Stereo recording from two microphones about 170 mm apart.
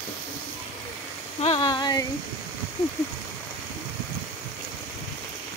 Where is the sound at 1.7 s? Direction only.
25° left (ahead or behind).